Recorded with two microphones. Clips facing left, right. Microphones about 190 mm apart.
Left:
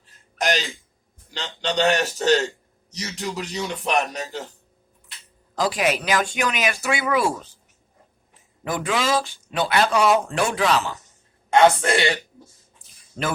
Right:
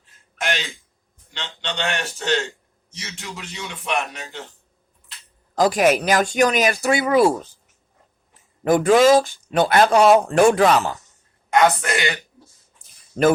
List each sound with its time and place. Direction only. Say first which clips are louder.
0.0 s a sound: left 3 dB; 40° left (ahead or behind)
1.3 s a man's voice: left 4 dB; 40° left (ahead or behind)
5.5 s speech: right 6 dB; 45° right (ahead or behind)
8.6 s speech: right 10 dB; 45° right (ahead or behind)
11.5 s a woman's voice: left 2 dB; 30° left (ahead or behind)